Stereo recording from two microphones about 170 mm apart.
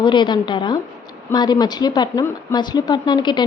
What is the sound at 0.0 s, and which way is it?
A woman's voice, 25° left (ahead or behind).